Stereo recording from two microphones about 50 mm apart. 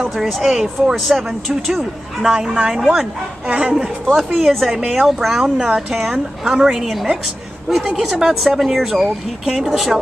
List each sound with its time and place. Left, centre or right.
0.0 s speech: centre
3.4 s speech: right
3.7 s speech: centre